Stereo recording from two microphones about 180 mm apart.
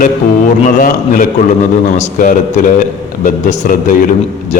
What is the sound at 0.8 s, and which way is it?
A man's voice, 50° left (ahead or behind).